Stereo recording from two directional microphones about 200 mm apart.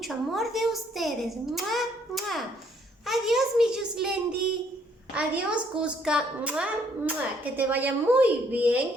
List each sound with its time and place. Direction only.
0.0 s a woman's voice: centre (ahead or behind)
5.1 s a woman's voice: 5° right (ahead or behind)